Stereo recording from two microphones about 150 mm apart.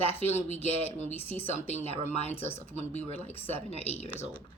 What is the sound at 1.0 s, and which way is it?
Speech, 15° left (ahead or behind).